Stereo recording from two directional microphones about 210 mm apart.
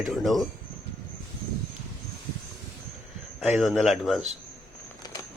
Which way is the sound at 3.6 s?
Centre (ahead or behind).